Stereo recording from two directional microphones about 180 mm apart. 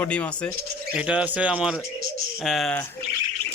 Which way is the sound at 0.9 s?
5° right (ahead or behind).